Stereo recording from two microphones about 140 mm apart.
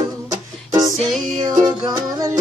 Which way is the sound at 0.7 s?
25° right (ahead or behind).